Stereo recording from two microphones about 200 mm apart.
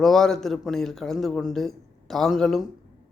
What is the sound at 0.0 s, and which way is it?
Speech, centre (ahead or behind).